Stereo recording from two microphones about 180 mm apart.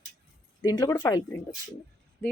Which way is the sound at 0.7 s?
20° left (ahead or behind).